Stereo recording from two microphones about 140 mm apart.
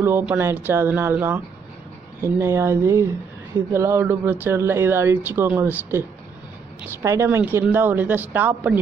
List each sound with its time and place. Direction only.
0.0 s speech: 15° right (ahead or behind)